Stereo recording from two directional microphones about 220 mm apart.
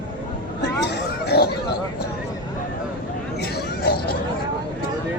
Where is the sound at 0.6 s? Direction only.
50° left (ahead or behind).